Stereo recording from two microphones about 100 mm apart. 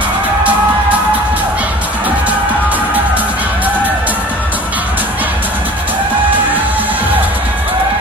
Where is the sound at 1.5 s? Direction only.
15° right (ahead or behind).